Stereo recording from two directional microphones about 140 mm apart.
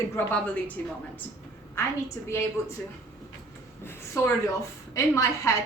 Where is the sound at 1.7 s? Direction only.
20° left (ahead or behind).